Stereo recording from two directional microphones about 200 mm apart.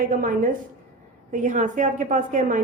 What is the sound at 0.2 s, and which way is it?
A woman's voice, 40° right (ahead or behind).